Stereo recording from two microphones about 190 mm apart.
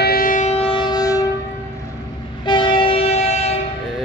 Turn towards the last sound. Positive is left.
turn(degrees=35)  # may be behind; listen again after turning